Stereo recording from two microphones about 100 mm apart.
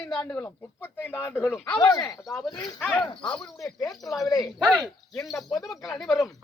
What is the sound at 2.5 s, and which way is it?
Speech, 45° left (ahead or behind).